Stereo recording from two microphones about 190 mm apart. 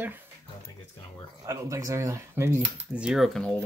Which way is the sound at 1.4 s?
15° right (ahead or behind).